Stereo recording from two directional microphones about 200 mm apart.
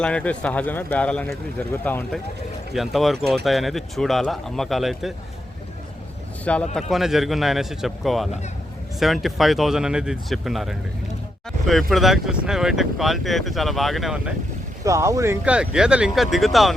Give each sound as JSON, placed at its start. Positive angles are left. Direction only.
{"t": 0.0, "sound": "speech", "side_deg": 5}
{"t": 6.4, "sound": "speech", "side_deg": 5}
{"t": 14.8, "sound": "speech", "side_deg": -15}